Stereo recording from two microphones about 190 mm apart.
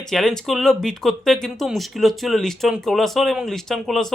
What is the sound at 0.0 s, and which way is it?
Speech, centre (ahead or behind).